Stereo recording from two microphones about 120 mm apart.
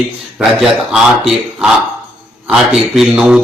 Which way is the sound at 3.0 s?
5° right (ahead or behind).